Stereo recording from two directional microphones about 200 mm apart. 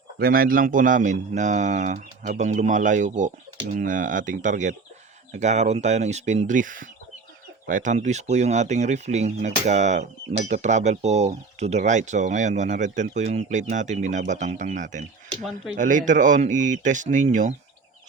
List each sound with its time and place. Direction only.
0.2 s speech: 45° right (ahead or behind)